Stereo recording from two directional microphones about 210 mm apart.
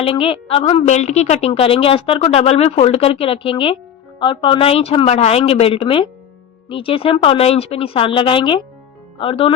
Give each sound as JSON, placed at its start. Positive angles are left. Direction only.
{"t": 0.0, "sound": "a woman's voice", "side_deg": 25}